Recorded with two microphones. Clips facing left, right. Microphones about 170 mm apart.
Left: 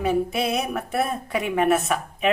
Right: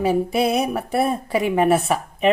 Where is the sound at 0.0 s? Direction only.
35° right (ahead or behind).